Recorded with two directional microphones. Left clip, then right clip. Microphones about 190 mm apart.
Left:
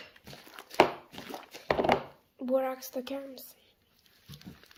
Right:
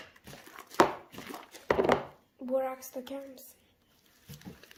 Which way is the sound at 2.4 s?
45° left (ahead or behind).